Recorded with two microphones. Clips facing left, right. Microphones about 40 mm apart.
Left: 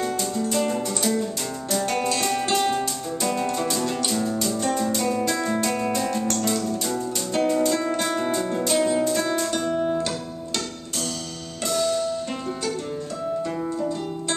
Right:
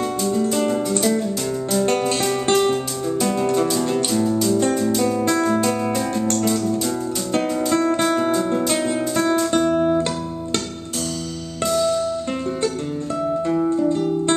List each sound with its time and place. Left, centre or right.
0.0 s music: centre
1.9 s music: right
2.5 s music: centre
9.8 s music: right
11.6 s music: centre
13.5 s music: centre
13.8 s music: right